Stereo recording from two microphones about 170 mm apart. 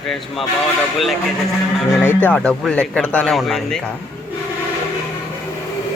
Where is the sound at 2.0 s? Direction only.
10° left (ahead or behind).